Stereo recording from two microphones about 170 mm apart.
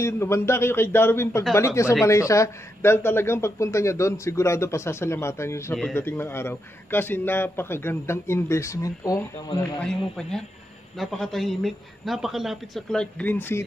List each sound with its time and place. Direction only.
0.0 s a man's voice: 15° left (ahead or behind)
11.0 s a man's voice: centre (ahead or behind)